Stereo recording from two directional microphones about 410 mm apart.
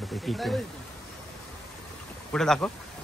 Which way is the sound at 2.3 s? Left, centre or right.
Centre.